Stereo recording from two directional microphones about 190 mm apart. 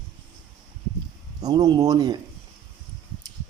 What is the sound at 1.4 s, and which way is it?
Speech, 20° right (ahead or behind).